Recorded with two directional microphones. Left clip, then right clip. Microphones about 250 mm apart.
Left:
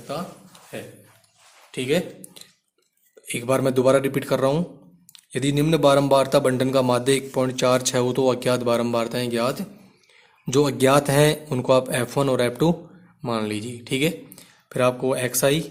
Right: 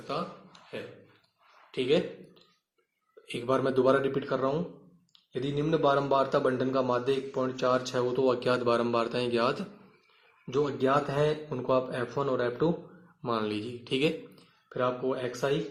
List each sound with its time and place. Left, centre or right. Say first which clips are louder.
0.1 s a sound: left 3 dB; centre
1.7 s a man's voice: left 3 dB; left
10.4 s speech: left 9 dB; left
13.2 s speech: left 5 dB; centre